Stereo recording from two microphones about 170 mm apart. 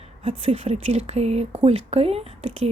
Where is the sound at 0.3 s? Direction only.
40° right (ahead or behind).